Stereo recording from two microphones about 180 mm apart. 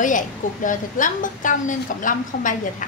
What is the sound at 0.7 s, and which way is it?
A woman's voice, 45° left (ahead or behind).